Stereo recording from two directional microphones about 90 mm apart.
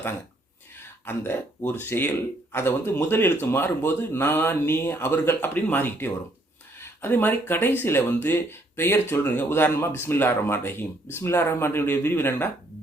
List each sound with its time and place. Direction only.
1.0 s speech: 25° left (ahead or behind)